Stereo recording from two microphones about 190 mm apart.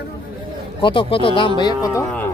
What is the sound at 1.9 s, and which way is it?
Speech, 10° left (ahead or behind).